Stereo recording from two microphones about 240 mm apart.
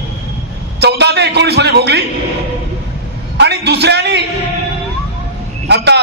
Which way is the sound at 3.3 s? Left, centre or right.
Right.